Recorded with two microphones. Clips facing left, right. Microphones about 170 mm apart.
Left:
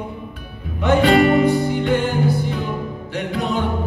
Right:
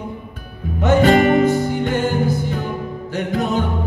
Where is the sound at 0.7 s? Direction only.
45° right (ahead or behind).